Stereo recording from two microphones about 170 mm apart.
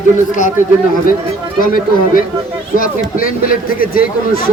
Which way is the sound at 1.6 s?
55° left (ahead or behind).